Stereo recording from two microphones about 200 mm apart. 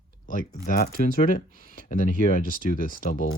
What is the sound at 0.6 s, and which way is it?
Speech, 50° left (ahead or behind).